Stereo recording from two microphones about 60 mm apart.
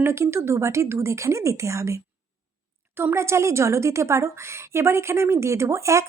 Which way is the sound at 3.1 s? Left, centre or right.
Right.